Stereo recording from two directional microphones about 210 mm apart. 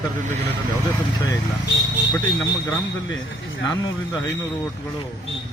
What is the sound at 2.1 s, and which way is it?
Speech, 10° left (ahead or behind).